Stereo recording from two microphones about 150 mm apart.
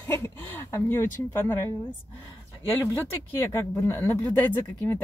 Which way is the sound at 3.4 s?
20° left (ahead or behind).